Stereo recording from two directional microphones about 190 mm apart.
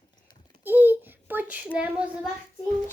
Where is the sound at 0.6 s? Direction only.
10° right (ahead or behind).